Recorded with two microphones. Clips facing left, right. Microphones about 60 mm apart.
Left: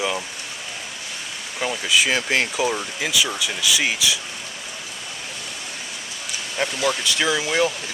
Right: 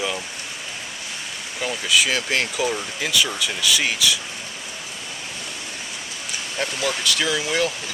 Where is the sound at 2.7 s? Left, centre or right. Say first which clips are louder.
Even; centre.